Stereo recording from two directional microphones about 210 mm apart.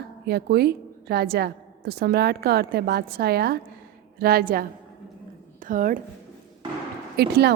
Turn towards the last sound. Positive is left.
turn(degrees=-50)  # may be behind; listen again after turning